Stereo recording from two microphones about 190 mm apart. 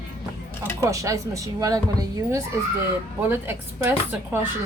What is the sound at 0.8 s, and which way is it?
Speech, 15° right (ahead or behind).